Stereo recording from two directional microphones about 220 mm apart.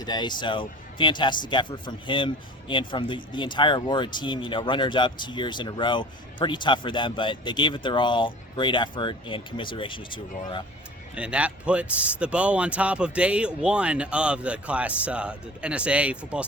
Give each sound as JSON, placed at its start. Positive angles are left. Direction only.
{"t": 0.0, "sound": "speech", "side_deg": 20}
{"t": 11.1, "sound": "a man's voice", "side_deg": -5}